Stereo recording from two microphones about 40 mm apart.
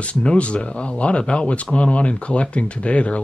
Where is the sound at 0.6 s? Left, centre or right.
Left.